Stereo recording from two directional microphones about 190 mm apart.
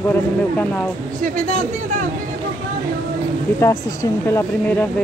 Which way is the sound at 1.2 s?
40° right (ahead or behind).